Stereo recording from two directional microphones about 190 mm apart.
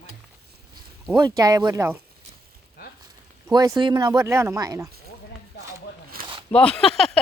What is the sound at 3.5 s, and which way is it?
Speech, 20° right (ahead or behind).